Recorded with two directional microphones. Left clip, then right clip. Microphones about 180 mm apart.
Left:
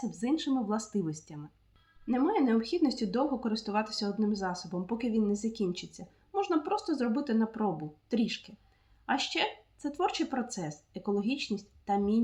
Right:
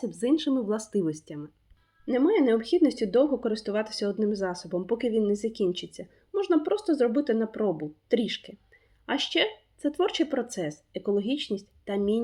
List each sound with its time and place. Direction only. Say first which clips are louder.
0.1 s speech: right 5 dB; 20° right (ahead or behind)